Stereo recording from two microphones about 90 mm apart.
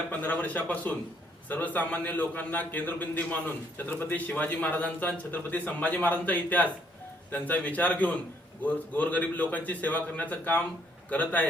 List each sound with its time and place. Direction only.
0.1 s a man's voice: 20° left (ahead or behind)